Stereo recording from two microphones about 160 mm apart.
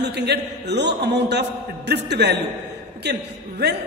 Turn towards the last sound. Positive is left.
turn(degrees=-90)